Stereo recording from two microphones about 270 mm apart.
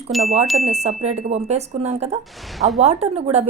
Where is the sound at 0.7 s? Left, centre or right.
Right.